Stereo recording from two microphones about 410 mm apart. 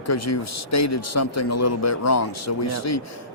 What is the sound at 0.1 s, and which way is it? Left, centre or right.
Speech, left.